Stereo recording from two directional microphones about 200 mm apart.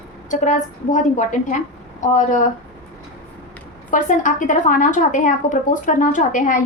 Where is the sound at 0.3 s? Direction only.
40° left (ahead or behind).